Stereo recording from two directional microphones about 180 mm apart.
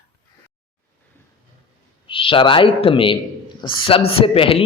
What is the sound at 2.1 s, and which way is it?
A man's voice, 30° left (ahead or behind).